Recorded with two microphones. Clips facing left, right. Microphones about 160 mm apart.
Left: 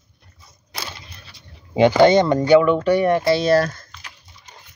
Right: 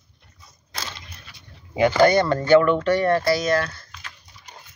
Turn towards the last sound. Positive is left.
turn(degrees=40)  # may be behind; listen again after turning